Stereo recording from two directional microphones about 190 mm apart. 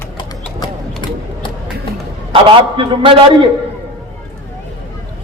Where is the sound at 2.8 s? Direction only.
25° right (ahead or behind).